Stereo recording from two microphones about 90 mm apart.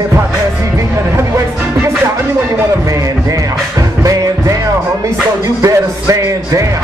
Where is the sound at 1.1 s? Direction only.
35° right (ahead or behind).